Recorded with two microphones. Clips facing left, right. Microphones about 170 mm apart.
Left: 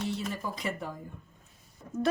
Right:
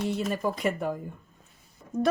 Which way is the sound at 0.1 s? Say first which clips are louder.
Right 6 dB; 55° right (ahead or behind).